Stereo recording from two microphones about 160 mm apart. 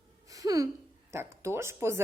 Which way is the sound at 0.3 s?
20° right (ahead or behind).